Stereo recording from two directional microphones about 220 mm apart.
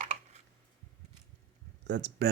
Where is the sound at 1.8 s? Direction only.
50° right (ahead or behind).